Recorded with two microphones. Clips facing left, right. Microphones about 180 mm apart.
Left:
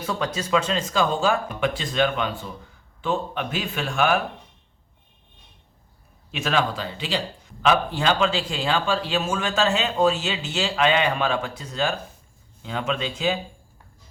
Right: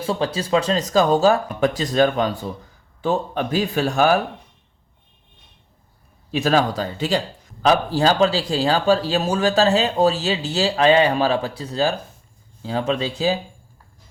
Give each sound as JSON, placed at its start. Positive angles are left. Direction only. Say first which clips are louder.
{"t": 0.0, "sound": "speech", "louder": "right 4 dB", "side_deg": -30}
{"t": 6.3, "sound": "speech", "louder": "right 5 dB", "side_deg": -40}